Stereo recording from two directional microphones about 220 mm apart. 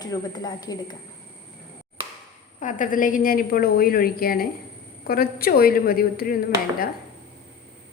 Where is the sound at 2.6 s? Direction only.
35° left (ahead or behind).